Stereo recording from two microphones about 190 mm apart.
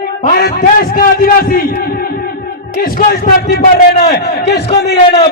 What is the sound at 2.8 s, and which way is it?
A man's voice, 45° left (ahead or behind).